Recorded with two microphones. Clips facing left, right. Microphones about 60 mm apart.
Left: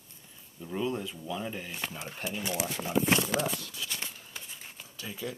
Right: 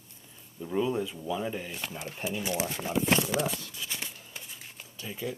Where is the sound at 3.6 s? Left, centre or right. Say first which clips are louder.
Even; centre.